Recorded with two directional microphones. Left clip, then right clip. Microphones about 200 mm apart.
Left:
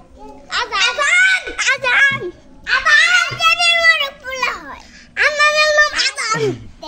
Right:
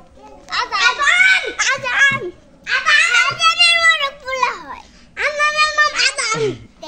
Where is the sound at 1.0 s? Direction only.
60° left (ahead or behind).